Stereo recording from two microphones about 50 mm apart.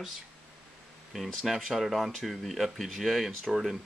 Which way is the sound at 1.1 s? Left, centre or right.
Centre.